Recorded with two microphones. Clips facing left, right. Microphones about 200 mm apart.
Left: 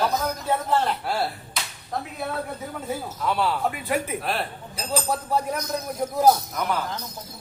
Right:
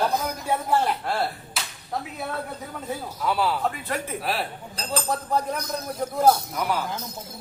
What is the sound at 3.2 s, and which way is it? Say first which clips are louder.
Speech: even; centre (ahead or behind).